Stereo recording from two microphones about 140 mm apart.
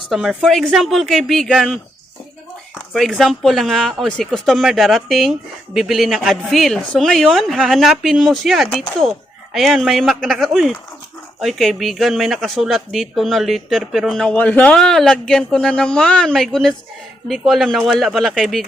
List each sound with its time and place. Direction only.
0.1 s speech: centre (ahead or behind)
2.9 s speech: centre (ahead or behind)